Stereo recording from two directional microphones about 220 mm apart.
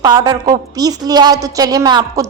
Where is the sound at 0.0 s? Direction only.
15° right (ahead or behind).